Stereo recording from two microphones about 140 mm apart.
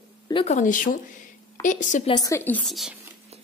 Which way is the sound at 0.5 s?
60° left (ahead or behind).